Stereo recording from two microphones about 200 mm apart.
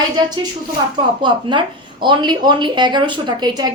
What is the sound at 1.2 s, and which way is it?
Speech, 25° right (ahead or behind).